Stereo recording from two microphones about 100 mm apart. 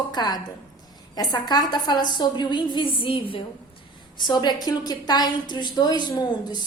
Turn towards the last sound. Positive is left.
turn(degrees=45)  # may be behind; listen again after turning